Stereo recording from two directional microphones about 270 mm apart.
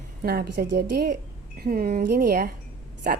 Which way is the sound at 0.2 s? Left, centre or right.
Right.